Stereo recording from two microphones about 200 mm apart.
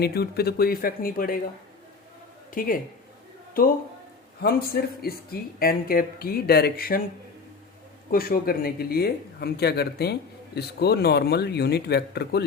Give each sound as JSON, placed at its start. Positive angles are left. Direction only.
{"t": 0.0, "sound": "speech", "side_deg": 50}
{"t": 2.6, "sound": "speech", "side_deg": 45}
{"t": 8.1, "sound": "speech", "side_deg": 45}